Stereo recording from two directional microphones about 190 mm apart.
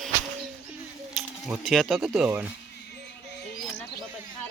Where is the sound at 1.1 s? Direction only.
Centre (ahead or behind).